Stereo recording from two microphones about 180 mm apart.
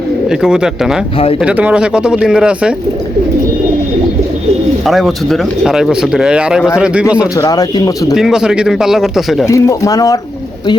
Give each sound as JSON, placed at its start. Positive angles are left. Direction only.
{"t": 0.3, "sound": "speech", "side_deg": -5}
{"t": 4.9, "sound": "speech", "side_deg": 0}
{"t": 7.3, "sound": "speech", "side_deg": 20}
{"t": 8.1, "sound": "speech", "side_deg": -5}
{"t": 9.5, "sound": "speech", "side_deg": 15}